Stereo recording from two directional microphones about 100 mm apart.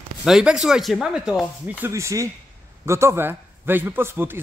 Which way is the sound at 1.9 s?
30° right (ahead or behind).